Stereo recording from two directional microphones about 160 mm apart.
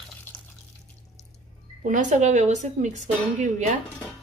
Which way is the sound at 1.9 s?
50° right (ahead or behind).